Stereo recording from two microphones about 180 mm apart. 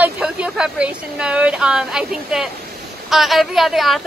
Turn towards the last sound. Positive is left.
turn(degrees=0)  # may be behind; listen again after turning